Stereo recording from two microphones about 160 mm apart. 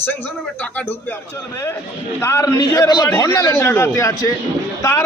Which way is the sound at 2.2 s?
15° left (ahead or behind).